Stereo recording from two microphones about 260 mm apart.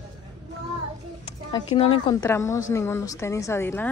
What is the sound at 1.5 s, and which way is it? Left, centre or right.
Speech, centre.